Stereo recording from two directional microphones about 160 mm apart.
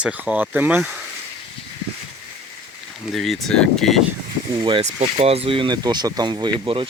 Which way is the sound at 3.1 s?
Centre (ahead or behind).